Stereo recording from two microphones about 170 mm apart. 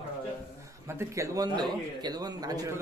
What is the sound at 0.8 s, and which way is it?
A man's voice, 15° right (ahead or behind).